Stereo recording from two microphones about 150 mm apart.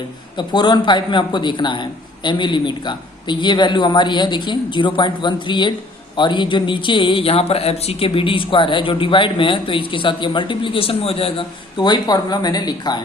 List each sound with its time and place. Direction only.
0.3 s speech: 30° left (ahead or behind)